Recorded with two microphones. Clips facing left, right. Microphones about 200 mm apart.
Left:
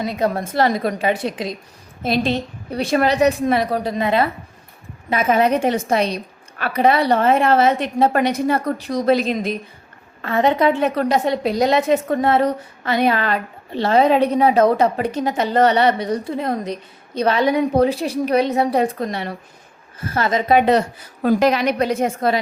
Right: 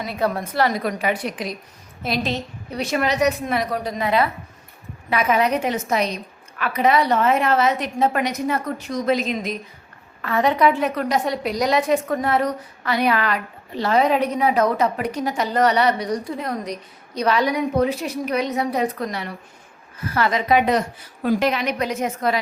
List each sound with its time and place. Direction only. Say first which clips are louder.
0.0 s a woman's voice: left 3 dB; 20° left (ahead or behind)
5.4 s a woman's voice: left 4 dB; 25° left (ahead or behind)
21.2 s a woman's voice: left 4 dB; 45° left (ahead or behind)